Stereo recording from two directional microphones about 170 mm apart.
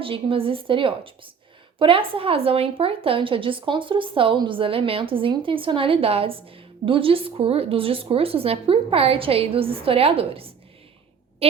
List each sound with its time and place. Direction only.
0.0 s a woman's voice: 30° right (ahead or behind)